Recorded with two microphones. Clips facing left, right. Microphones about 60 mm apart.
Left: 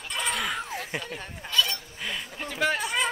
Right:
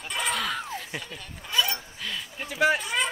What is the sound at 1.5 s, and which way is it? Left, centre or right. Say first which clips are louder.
Hiccup: even; centre.